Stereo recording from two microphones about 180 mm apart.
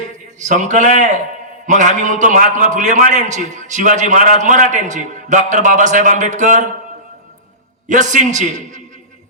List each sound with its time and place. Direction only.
0.3 s a man's voice: 45° right (ahead or behind)
7.9 s a man's voice: 45° right (ahead or behind)